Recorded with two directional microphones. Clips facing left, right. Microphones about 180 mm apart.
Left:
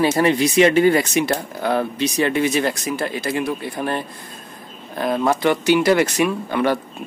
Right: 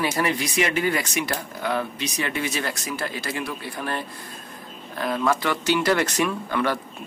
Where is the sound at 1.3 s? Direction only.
40° left (ahead or behind).